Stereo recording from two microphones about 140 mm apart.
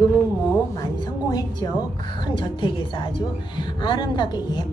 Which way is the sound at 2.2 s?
35° left (ahead or behind).